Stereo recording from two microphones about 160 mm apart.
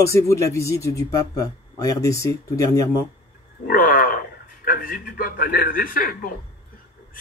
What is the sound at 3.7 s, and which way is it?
A man's voice, 65° left (ahead or behind).